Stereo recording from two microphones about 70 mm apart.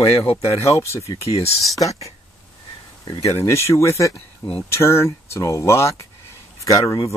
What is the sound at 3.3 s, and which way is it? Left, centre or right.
Speech, left.